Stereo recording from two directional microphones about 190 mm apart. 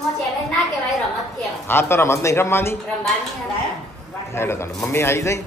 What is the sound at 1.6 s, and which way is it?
A man's voice, 15° left (ahead or behind).